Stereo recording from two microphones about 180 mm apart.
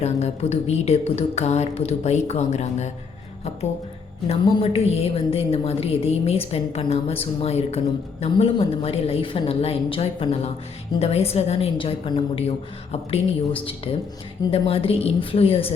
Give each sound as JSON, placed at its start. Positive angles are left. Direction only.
{"t": 0.0, "sound": "a woman's voice", "side_deg": 35}
{"t": 4.3, "sound": "a woman's voice", "side_deg": 35}